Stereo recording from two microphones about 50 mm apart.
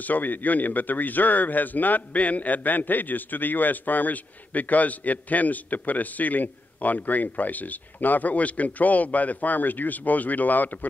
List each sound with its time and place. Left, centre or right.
0.0 s speech: left